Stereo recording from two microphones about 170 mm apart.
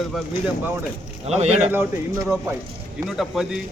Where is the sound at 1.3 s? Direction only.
40° right (ahead or behind).